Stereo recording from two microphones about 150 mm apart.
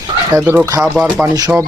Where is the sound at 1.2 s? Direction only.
25° right (ahead or behind).